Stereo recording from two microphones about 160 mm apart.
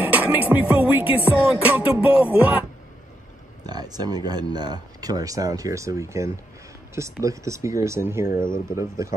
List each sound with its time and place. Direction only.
0.0 s music: 10° right (ahead or behind)
3.6 s speech: 25° right (ahead or behind)